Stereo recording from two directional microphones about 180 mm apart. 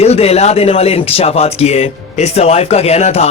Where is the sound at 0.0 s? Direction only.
35° left (ahead or behind).